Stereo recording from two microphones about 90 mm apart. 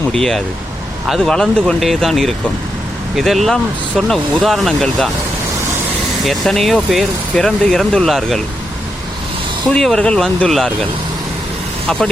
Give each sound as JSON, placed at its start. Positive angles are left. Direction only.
{"t": 0.1, "sound": "speech", "side_deg": 5}
{"t": 1.3, "sound": "speech", "side_deg": 10}
{"t": 6.2, "sound": "speech", "side_deg": 5}
{"t": 9.6, "sound": "speech", "side_deg": 5}